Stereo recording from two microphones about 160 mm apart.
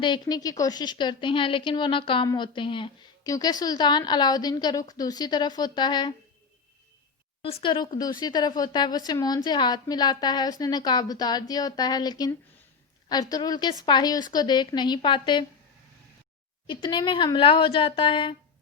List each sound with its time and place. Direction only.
0.0 s a woman's voice: 25° left (ahead or behind)
7.4 s a woman's voice: 35° left (ahead or behind)
16.6 s speech: 30° left (ahead or behind)